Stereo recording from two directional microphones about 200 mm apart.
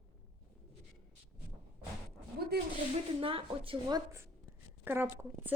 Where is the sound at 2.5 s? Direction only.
55° right (ahead or behind).